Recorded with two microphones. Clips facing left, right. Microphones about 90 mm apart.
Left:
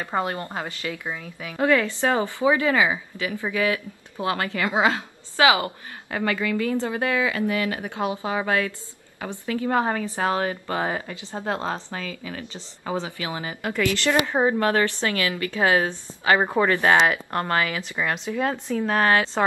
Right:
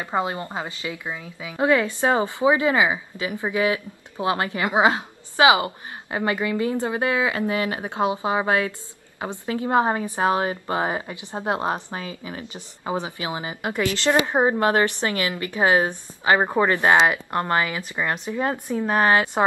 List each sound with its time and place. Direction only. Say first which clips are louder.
0.0 s a woman's voice: right 1 dB; 15° right (ahead or behind)